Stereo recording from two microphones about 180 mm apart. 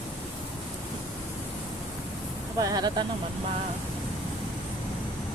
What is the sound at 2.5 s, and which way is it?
Speech, 20° right (ahead or behind).